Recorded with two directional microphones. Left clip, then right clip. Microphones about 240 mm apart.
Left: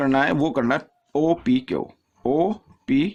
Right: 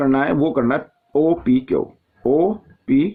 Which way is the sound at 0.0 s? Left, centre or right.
Left.